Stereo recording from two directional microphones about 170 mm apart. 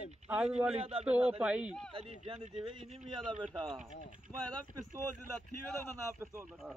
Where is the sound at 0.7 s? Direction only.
35° right (ahead or behind).